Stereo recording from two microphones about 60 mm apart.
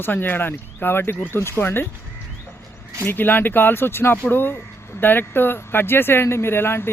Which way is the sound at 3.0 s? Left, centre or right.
Left.